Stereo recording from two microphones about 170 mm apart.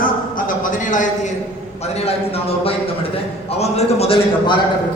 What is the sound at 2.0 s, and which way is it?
A man's voice, 35° left (ahead or behind).